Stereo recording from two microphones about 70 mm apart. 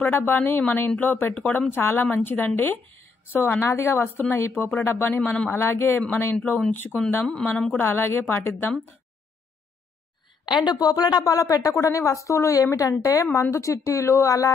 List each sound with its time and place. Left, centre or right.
0.0 s speech: left
3.6 s speech: left
4.9 s speech: left
5.9 s speech: left
7.2 s a woman's voice: centre
7.8 s speech: left
10.4 s a woman's voice: left